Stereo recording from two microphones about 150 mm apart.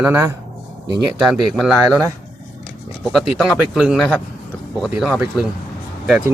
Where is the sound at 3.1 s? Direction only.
Centre (ahead or behind).